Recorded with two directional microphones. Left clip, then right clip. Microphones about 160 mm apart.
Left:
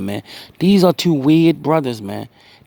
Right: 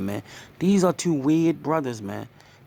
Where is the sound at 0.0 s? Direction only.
35° left (ahead or behind).